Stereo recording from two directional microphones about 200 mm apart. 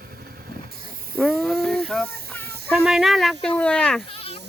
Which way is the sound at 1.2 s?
Centre (ahead or behind).